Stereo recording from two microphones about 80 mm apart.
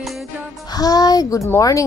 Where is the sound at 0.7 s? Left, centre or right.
Left.